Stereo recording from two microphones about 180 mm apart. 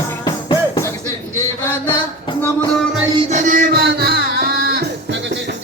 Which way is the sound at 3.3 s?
45° right (ahead or behind).